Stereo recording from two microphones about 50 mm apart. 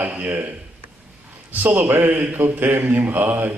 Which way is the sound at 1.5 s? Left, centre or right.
Right.